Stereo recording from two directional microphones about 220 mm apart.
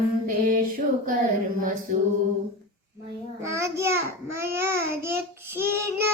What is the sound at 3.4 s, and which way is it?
Child singing, 15° right (ahead or behind).